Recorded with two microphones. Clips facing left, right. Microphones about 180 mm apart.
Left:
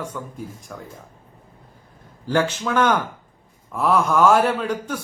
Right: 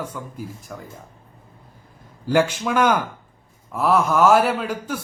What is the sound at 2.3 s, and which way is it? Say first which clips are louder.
Speech: right 2 dB; 10° right (ahead or behind).